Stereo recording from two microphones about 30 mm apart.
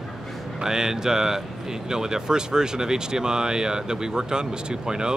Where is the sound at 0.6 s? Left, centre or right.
Centre.